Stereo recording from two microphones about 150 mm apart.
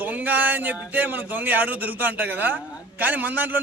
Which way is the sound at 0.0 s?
10° right (ahead or behind).